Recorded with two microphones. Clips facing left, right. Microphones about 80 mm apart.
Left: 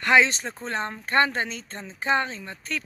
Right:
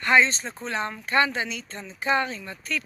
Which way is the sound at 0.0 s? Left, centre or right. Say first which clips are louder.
Left 1 dB; left.